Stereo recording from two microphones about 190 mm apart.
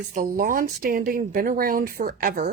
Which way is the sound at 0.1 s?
45° right (ahead or behind).